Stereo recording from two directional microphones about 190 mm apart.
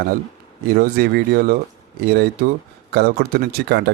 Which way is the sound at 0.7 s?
55° right (ahead or behind).